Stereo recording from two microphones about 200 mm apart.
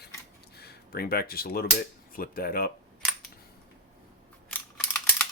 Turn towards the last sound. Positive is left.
turn(degrees=5)  # may be behind; listen again after turning